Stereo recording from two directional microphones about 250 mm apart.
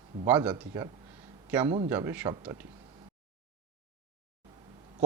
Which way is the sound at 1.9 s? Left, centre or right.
Centre.